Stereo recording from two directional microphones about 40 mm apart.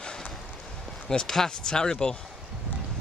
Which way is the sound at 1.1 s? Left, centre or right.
Centre.